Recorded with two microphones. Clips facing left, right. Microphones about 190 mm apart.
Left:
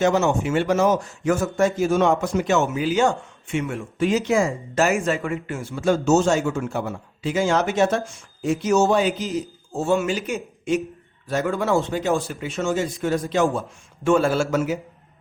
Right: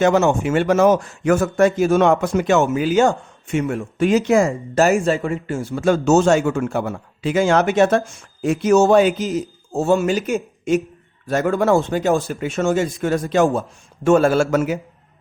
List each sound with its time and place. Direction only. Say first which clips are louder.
0.0 s a man's voice: right 4 dB; 55° right (ahead or behind); by 5.6 s 30° right (ahead or behind)
5.7 s a man's voice: right 3 dB; 60° right (ahead or behind)